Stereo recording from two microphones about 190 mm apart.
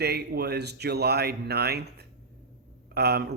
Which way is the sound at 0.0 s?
55° right (ahead or behind).